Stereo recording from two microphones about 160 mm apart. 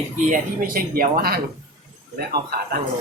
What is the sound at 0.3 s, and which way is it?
A man's voice, 60° right (ahead or behind).